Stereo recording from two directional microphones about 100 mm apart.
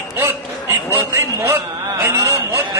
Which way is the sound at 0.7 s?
30° right (ahead or behind).